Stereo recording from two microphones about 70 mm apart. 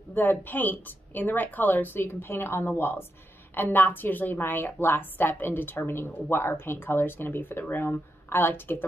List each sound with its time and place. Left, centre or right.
0.1 s a woman's voice: left